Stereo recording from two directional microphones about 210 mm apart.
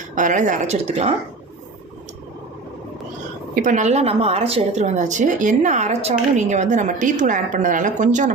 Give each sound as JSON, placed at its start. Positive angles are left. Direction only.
{"t": 0.2, "sound": "a woman's voice", "side_deg": -35}
{"t": 3.5, "sound": "a woman's voice", "side_deg": -40}